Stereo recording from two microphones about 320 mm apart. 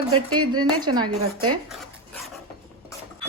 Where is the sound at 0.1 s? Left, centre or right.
Right.